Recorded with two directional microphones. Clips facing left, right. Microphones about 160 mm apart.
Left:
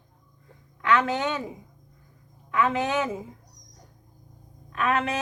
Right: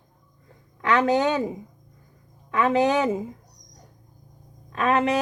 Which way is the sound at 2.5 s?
35° right (ahead or behind).